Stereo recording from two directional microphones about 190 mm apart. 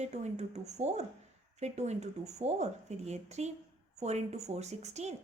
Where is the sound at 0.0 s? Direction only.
35° right (ahead or behind).